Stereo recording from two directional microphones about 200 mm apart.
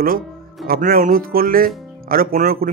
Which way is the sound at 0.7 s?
45° right (ahead or behind).